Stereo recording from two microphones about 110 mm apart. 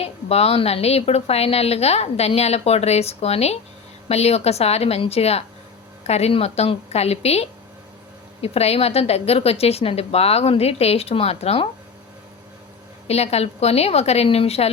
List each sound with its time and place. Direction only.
0.0 s a woman's voice: 70° left (ahead or behind)
13.1 s a woman's voice: 75° left (ahead or behind)